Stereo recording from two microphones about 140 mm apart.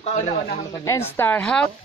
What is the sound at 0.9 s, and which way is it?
Speech, 20° left (ahead or behind).